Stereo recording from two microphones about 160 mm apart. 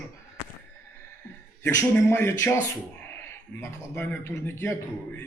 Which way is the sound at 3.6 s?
10° left (ahead or behind).